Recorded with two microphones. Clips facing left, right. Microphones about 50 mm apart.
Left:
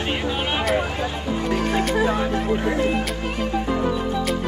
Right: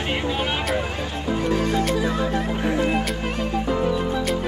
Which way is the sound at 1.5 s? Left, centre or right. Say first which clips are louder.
Left 2 dB; left.